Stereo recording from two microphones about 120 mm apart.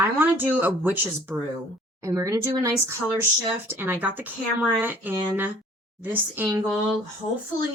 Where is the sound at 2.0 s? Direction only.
25° right (ahead or behind).